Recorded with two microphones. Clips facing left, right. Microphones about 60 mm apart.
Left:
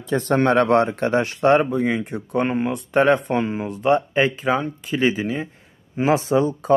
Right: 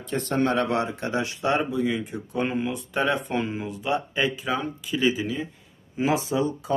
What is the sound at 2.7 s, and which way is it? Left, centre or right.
Speech, left.